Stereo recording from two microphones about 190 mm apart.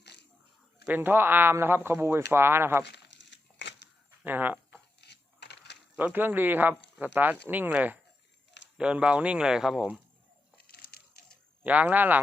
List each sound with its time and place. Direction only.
0.0 s dog: 65° left (ahead or behind)
0.9 s speech: 10° right (ahead or behind)
2.8 s crumpling: 60° left (ahead or behind)
4.2 s a sound: 10° right (ahead or behind)
4.9 s coin: 60° left (ahead or behind)
6.0 s speech: 10° right (ahead or behind)
10.6 s a sound: 55° left (ahead or behind)
11.6 s speech: 10° right (ahead or behind)